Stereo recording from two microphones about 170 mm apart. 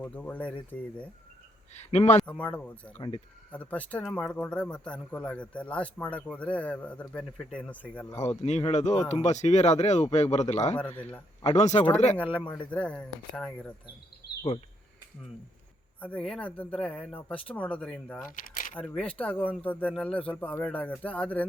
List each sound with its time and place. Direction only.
0.0 s speech: 10° left (ahead or behind)
1.9 s speech: 40° left (ahead or behind)
2.2 s speech: 5° left (ahead or behind)
8.4 s speech: 40° left (ahead or behind)
10.8 s speech: 10° left (ahead or behind)
11.4 s speech: 40° left (ahead or behind)
12.1 s speech: 5° left (ahead or behind)
14.2 s a sound: 70° left (ahead or behind)
16.0 s speech: 10° left (ahead or behind)